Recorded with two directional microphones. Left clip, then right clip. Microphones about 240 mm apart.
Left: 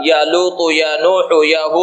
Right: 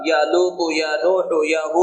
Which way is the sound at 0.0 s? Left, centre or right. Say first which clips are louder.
Left 5 dB; left.